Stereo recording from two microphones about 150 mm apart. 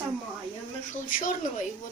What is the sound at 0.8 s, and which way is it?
Speech, 65° left (ahead or behind).